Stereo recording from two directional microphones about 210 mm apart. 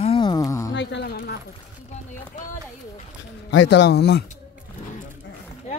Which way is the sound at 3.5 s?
60° left (ahead or behind).